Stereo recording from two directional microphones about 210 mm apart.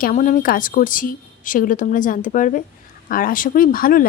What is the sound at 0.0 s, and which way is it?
Speech, 40° left (ahead or behind).